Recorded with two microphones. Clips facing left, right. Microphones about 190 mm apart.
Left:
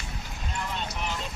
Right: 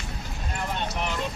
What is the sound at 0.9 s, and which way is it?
Vehicle, 60° right (ahead or behind).